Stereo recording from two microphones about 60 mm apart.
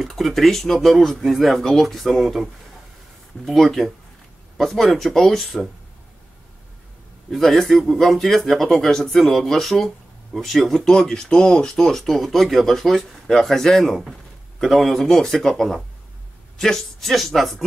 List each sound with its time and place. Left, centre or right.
0.0 s speech: centre
3.4 s speech: centre
7.2 s speech: centre